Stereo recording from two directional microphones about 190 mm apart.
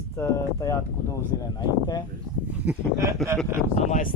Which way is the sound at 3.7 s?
40° left (ahead or behind).